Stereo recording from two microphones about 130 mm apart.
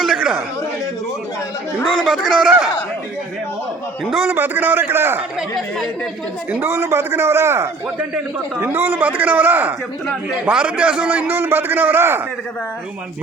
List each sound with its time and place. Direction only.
0.0 s a sound: 5° right (ahead or behind)
1.8 s a man's voice: centre (ahead or behind)
4.1 s a man's voice: 5° right (ahead or behind)
4.4 s a man's voice: 15° right (ahead or behind)
5.4 s a man's voice: centre (ahead or behind)
6.5 s a man's voice: 15° right (ahead or behind)